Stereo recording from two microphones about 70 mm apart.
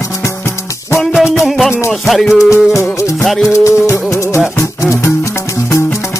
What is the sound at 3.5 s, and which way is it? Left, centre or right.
Music, left.